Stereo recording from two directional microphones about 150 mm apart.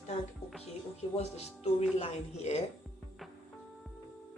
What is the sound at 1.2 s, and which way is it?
A woman's voice, 45° left (ahead or behind).